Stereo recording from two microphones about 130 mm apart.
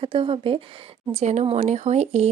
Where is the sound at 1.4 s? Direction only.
50° right (ahead or behind).